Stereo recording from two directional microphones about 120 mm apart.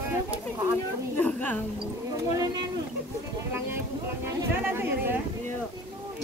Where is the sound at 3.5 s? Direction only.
20° right (ahead or behind).